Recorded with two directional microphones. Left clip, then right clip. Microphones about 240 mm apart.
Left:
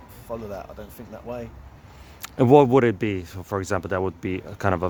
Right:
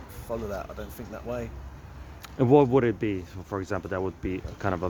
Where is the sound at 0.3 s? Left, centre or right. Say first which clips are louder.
Even; centre.